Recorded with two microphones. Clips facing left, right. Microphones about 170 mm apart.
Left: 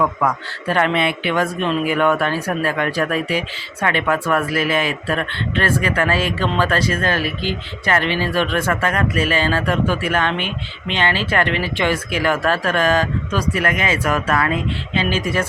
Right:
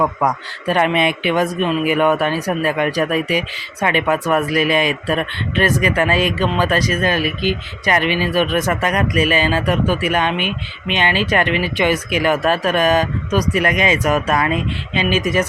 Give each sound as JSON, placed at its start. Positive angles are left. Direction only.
{"t": 0.0, "sound": "a man's voice", "side_deg": -15}